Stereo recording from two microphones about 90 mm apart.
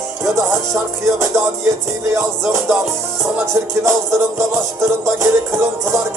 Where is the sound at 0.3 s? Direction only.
35° right (ahead or behind).